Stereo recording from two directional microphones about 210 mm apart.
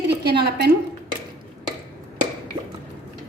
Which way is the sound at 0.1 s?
50° right (ahead or behind).